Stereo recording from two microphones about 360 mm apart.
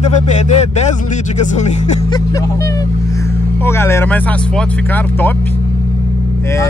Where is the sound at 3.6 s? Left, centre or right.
Centre.